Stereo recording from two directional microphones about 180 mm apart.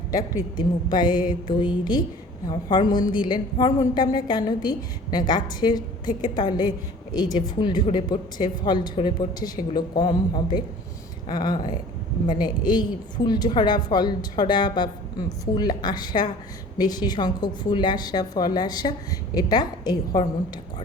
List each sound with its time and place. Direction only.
0.1 s a woman's voice: 20° left (ahead or behind)